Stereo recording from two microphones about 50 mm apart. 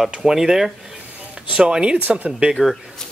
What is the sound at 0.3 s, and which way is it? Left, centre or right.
Speech, centre.